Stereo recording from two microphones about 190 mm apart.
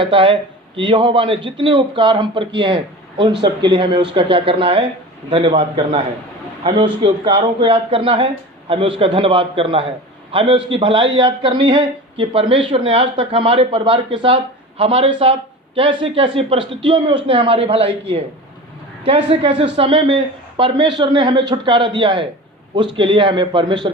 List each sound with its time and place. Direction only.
0.0 s speech: 25° right (ahead or behind)